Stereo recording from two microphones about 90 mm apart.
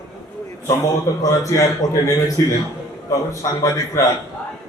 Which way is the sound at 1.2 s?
35° left (ahead or behind).